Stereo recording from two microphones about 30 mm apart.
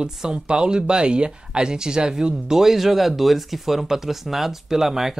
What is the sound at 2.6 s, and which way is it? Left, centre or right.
Speech, centre.